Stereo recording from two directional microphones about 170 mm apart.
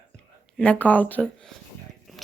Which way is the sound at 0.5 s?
5° left (ahead or behind).